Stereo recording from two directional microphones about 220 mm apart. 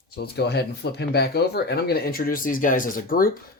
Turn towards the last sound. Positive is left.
turn(degrees=40)  # may be behind; listen again after turning